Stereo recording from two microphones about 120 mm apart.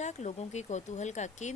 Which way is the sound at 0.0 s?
70° left (ahead or behind).